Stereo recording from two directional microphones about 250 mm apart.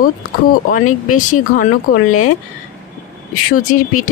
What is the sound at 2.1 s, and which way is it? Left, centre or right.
Speech, left.